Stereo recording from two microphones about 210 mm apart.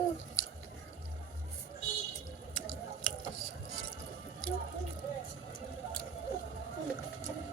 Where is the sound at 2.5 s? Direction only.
75° left (ahead or behind).